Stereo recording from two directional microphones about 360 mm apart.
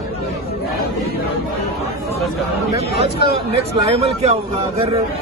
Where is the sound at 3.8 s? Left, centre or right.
Centre.